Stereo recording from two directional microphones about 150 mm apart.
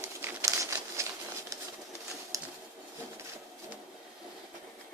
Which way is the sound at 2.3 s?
20° right (ahead or behind).